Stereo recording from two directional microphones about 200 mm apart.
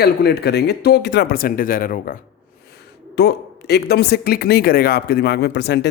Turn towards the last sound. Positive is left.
turn(degrees=55)  # may be behind; listen again after turning